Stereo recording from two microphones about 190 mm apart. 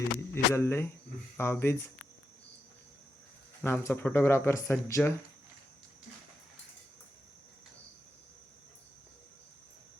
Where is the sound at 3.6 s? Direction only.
10° left (ahead or behind).